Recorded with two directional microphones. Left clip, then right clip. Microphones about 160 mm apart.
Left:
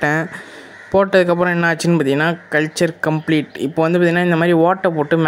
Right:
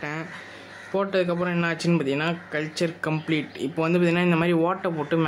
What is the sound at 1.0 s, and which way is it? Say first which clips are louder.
Speech: left 11 dB; 50° left (ahead or behind).